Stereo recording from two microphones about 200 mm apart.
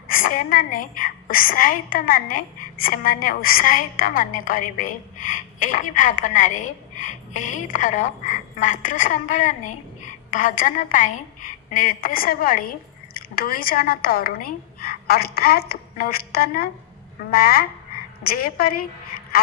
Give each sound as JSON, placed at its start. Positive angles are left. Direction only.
{"t": 0.1, "sound": "a woman's voice", "side_deg": 45}